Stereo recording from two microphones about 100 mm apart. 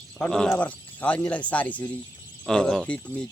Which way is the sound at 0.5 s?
15° left (ahead or behind).